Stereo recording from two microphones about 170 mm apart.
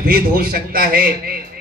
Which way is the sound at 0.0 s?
65° right (ahead or behind).